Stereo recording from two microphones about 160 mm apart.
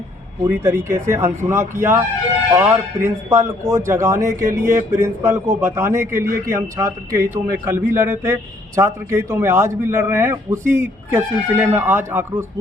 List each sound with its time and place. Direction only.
0.4 s a man's voice: 15° right (ahead or behind)